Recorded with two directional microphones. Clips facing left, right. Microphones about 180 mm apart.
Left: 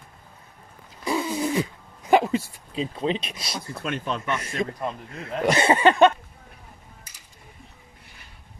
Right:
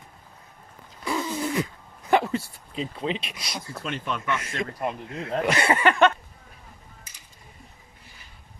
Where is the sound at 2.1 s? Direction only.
15° left (ahead or behind).